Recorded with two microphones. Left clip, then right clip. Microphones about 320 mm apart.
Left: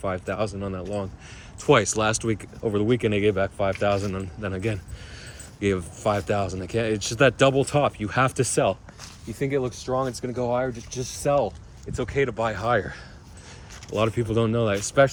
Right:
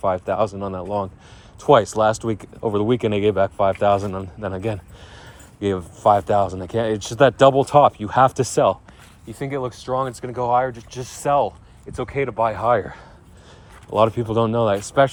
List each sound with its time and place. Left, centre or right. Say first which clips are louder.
0.0 s speech: right 7 dB; centre
9.3 s speech: even; centre
13.9 s speech: right 6 dB; centre